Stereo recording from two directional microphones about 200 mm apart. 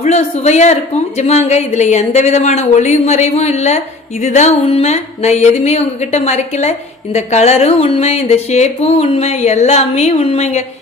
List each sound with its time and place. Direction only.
0.0 s music: 30° left (ahead or behind)